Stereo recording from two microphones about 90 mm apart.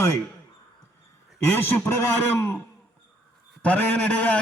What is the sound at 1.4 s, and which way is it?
A man's voice, 25° left (ahead or behind).